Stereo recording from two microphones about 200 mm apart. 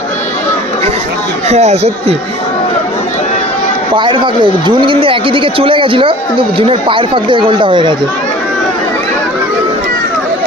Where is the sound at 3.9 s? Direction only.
25° right (ahead or behind).